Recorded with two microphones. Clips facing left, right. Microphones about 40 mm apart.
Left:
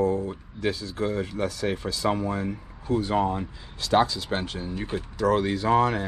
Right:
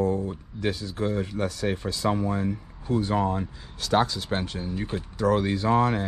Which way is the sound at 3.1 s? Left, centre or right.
Left.